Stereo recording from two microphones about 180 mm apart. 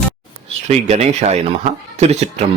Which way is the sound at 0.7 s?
40° right (ahead or behind).